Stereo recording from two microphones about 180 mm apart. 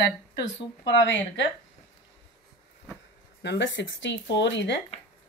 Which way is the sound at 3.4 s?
75° left (ahead or behind).